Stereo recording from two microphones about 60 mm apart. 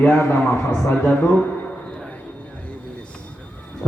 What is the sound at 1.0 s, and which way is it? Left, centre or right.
Speech, left.